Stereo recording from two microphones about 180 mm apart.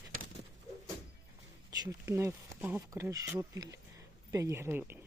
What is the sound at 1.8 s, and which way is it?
Speech, 15° right (ahead or behind).